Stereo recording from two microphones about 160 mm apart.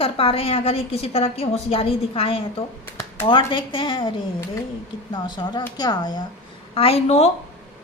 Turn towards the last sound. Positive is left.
turn(degrees=40)  # may be behind; listen again after turning